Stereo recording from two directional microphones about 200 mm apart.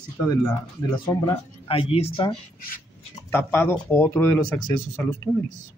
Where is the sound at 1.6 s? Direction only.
30° left (ahead or behind).